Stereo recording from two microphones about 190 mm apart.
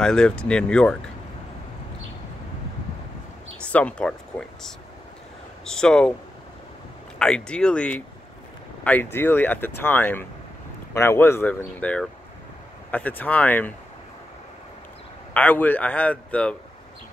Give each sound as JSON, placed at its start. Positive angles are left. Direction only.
{"t": 0.0, "sound": "speech", "side_deg": 5}
{"t": 3.7, "sound": "speech", "side_deg": 5}
{"t": 7.2, "sound": "speech", "side_deg": 5}
{"t": 15.3, "sound": "speech", "side_deg": 10}